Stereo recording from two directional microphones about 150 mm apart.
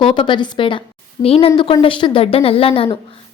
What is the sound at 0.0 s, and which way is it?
A woman's voice, 35° left (ahead or behind).